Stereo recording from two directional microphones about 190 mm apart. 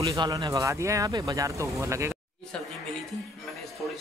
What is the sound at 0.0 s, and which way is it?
Speech, 20° right (ahead or behind).